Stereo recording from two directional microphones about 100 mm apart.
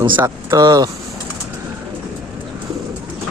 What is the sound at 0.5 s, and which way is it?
Speech, 40° right (ahead or behind).